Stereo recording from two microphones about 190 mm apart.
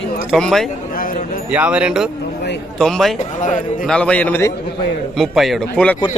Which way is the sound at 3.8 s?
5° left (ahead or behind).